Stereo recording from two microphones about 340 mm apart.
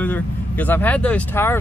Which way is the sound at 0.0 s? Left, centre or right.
Centre.